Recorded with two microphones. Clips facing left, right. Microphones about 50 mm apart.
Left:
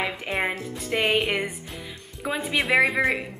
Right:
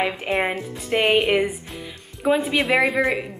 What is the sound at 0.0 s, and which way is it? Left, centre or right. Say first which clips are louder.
Speech: right 4 dB; centre.